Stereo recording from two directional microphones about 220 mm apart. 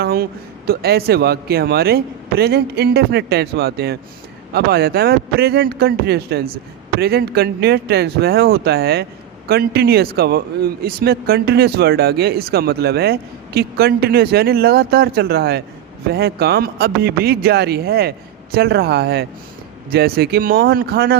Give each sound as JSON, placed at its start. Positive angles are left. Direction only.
{"t": 0.0, "sound": "speech", "side_deg": -45}